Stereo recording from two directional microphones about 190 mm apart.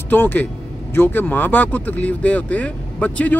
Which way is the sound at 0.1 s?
10° left (ahead or behind).